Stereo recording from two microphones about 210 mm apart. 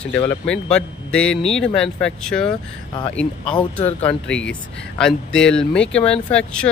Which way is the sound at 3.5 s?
30° left (ahead or behind).